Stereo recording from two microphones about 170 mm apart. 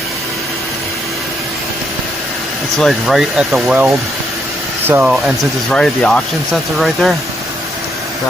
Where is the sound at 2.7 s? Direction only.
Centre (ahead or behind).